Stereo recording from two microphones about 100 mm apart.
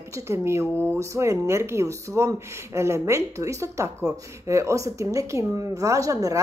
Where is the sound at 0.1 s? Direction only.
30° right (ahead or behind).